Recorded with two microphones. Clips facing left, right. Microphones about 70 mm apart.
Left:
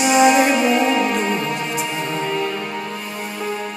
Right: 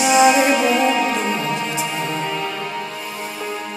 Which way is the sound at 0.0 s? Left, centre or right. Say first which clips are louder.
Even; centre.